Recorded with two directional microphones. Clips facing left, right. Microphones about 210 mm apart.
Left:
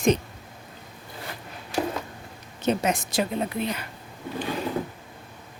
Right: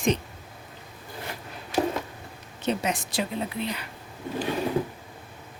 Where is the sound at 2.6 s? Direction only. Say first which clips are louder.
Left 3 dB; 45° left (ahead or behind).